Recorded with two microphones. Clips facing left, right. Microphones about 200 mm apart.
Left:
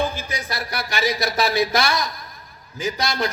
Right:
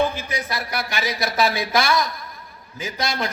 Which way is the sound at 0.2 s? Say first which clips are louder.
Right 1 dB; 55° right (ahead or behind).